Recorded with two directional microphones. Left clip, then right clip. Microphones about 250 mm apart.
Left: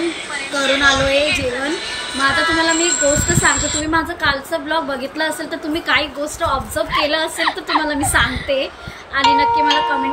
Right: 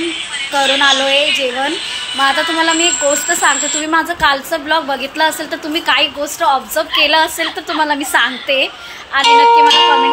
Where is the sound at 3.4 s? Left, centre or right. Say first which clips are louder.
Right 3 dB; centre.